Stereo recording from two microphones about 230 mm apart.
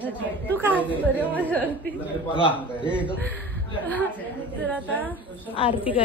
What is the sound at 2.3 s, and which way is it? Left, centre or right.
Speech, left.